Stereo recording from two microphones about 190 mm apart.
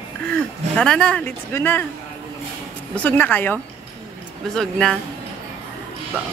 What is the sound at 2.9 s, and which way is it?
A woman's voice, 10° left (ahead or behind).